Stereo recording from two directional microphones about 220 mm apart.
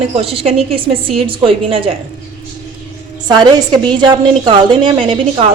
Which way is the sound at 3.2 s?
20° right (ahead or behind).